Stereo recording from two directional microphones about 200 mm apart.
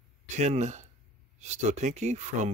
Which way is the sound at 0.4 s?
35° right (ahead or behind).